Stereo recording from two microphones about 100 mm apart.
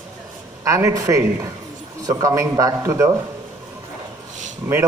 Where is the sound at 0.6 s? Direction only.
30° right (ahead or behind).